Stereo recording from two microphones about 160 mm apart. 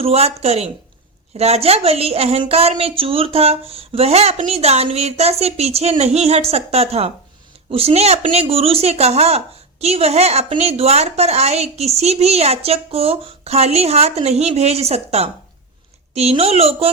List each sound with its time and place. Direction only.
0.0 s a woman's voice: 40° right (ahead or behind)